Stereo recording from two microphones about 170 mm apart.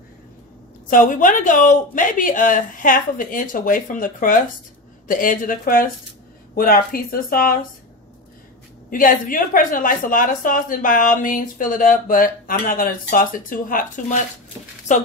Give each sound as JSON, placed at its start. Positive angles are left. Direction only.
{"t": 0.8, "sound": "a woman's voice", "side_deg": 55}
{"t": 8.9, "sound": "a woman's voice", "side_deg": 55}